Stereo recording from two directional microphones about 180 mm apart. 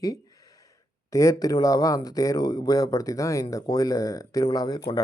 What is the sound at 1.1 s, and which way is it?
Speech, 15° left (ahead or behind).